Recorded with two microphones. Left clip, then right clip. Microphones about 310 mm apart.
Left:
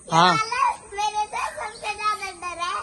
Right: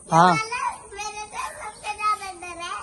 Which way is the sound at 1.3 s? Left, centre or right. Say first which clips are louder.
Left 4 dB; centre.